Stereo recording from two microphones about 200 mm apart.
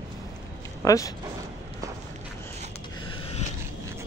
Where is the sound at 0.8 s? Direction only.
15° left (ahead or behind).